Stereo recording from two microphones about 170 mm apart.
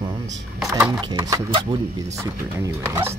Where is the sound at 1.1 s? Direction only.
25° right (ahead or behind).